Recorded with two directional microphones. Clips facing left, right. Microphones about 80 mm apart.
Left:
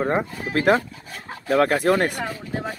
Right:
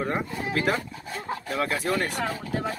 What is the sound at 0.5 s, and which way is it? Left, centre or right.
Speech, left.